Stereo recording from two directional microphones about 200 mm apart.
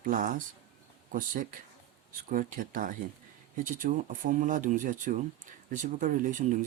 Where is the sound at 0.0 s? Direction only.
40° right (ahead or behind).